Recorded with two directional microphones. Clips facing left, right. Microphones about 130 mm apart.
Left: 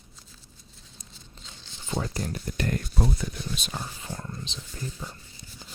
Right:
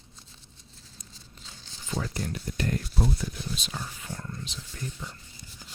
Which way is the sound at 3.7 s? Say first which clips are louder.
Left 2 dB; 30° left (ahead or behind).